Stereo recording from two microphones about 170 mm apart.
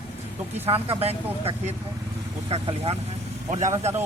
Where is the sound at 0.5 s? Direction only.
35° right (ahead or behind).